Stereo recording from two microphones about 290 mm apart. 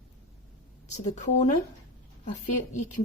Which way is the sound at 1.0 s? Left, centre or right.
Left.